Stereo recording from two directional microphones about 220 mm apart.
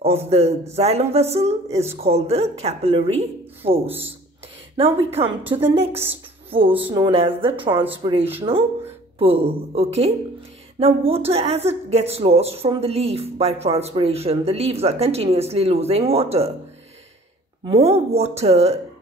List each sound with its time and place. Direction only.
0.3 s speech: 30° right (ahead or behind)
17.6 s speech: 30° right (ahead or behind)